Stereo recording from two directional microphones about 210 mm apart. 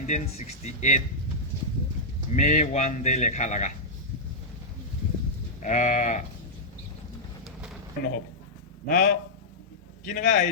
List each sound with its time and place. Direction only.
0.1 s speech: 30° left (ahead or behind)
2.3 s speech: 35° left (ahead or behind)
5.6 s speech: 35° left (ahead or behind)
8.9 s speech: 40° left (ahead or behind)